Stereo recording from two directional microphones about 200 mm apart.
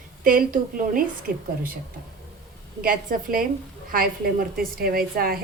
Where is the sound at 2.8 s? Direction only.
45° right (ahead or behind).